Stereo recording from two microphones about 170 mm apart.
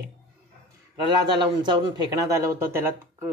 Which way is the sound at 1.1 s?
25° right (ahead or behind).